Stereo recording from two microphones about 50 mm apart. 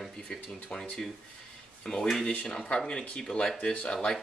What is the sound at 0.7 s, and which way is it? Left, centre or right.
Speech, left.